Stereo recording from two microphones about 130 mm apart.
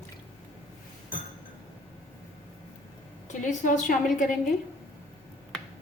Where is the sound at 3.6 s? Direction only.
80° left.